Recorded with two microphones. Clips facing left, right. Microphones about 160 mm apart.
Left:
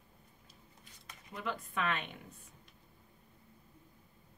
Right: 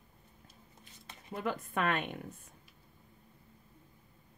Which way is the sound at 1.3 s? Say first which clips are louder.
Right 4 dB; 50° right (ahead or behind).